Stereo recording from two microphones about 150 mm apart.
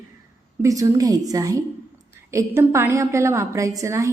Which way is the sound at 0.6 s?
25° right (ahead or behind).